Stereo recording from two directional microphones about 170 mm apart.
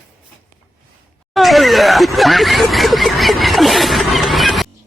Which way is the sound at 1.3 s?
Centre (ahead or behind).